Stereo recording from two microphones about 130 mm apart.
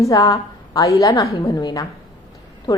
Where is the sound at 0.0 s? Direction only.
25° left (ahead or behind).